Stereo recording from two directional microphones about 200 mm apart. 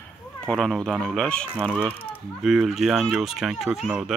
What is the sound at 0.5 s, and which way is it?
Speech, centre (ahead or behind).